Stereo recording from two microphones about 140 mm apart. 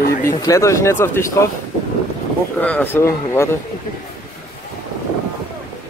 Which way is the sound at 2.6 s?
10° left (ahead or behind).